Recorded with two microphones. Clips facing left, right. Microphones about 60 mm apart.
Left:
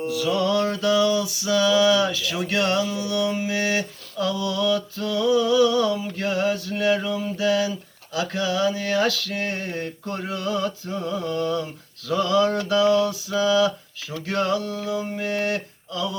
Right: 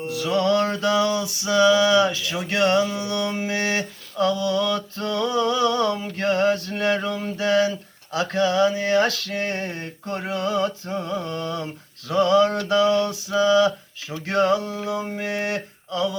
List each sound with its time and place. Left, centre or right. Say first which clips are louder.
0.1 s music: right 2 dB; right
4.4 s a sound: even; right
11.0 s mantra: left 3 dB; right
11.6 s music: right 1 dB; right
14.3 s mantra: right 3 dB; right